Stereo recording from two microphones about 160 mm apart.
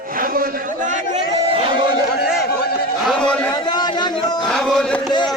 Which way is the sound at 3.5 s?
25° left (ahead or behind).